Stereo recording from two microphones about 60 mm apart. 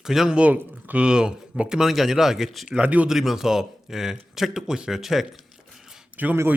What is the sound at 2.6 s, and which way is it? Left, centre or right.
Speech, centre.